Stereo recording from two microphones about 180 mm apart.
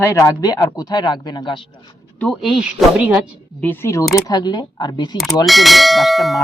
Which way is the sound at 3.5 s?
10° left (ahead or behind).